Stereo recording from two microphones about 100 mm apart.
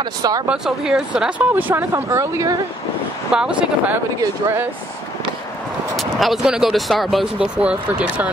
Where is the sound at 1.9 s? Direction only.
30° right (ahead or behind).